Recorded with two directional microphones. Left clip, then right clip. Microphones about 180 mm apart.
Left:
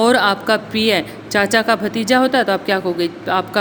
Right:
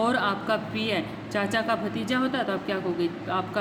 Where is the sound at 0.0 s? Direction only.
40° left (ahead or behind).